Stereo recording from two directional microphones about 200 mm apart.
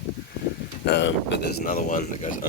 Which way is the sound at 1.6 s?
40° left (ahead or behind).